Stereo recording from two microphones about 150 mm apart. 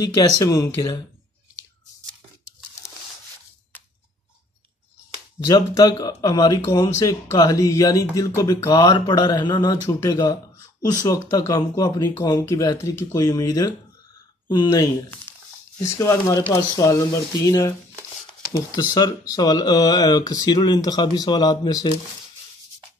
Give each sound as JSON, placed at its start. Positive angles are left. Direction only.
{"t": 0.0, "sound": "speech", "side_deg": 25}
{"t": 5.5, "sound": "speech", "side_deg": 25}